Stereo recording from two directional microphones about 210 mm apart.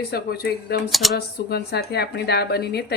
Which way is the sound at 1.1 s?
50° left (ahead or behind).